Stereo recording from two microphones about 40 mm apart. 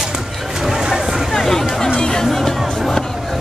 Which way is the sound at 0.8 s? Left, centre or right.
Centre.